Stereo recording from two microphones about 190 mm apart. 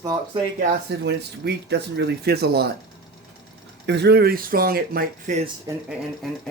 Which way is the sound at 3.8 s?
60° right (ahead or behind).